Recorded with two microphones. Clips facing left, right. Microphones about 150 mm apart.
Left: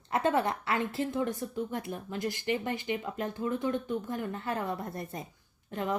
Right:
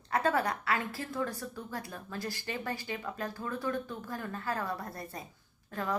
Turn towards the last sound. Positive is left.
turn(degrees=20)  # may be behind; listen again after turning